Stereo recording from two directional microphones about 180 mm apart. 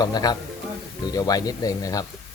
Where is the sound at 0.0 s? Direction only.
20° left (ahead or behind).